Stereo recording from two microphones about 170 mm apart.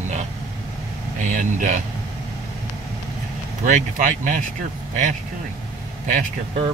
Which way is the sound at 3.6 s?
50° right (ahead or behind).